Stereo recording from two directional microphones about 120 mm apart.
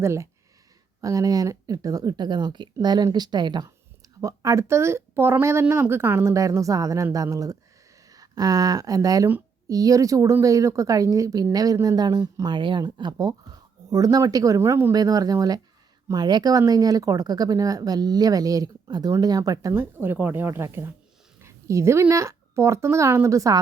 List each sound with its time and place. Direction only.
0.0 s speech: 25° right (ahead or behind)
4.2 s speech: 25° right (ahead or behind)
14.9 s speech: 30° right (ahead or behind)
19.8 s speech: 20° right (ahead or behind)